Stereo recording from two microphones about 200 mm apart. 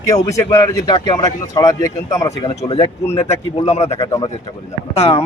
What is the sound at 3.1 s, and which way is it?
Speech, 15° left (ahead or behind).